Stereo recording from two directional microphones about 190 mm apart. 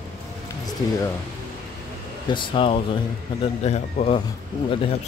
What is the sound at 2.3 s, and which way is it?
Speech, 25° left (ahead or behind).